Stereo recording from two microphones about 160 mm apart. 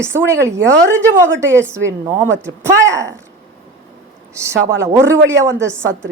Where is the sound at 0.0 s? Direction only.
15° right (ahead or behind).